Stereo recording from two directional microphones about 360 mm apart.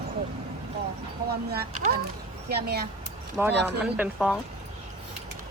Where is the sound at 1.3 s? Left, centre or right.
Right.